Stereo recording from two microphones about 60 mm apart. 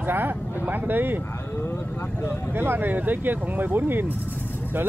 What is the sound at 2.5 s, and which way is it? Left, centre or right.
Speech, right.